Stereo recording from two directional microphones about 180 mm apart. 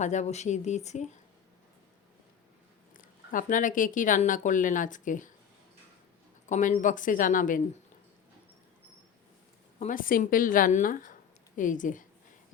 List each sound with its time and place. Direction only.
0.0 s speech: 40° left (ahead or behind)
3.0 s speech: 45° left (ahead or behind)
6.5 s speech: 45° left (ahead or behind)
9.7 s a woman's voice: 45° left (ahead or behind)